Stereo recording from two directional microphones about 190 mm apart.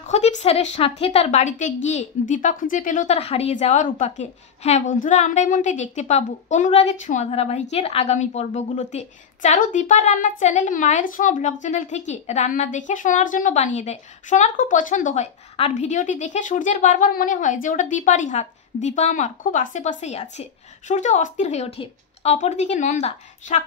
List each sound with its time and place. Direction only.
0.1 s speech: 35° left (ahead or behind)